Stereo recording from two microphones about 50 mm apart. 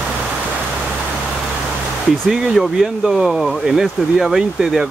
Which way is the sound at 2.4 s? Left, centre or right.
Centre.